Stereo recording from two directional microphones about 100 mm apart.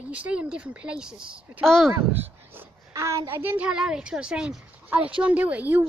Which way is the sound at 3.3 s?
20° right (ahead or behind).